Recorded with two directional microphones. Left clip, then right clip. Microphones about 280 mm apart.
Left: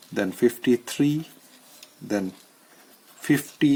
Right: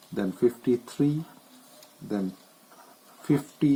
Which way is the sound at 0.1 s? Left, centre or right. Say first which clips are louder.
Left 3 dB; left.